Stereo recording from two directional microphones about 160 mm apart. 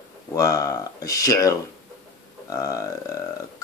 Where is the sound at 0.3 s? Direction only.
20° left (ahead or behind).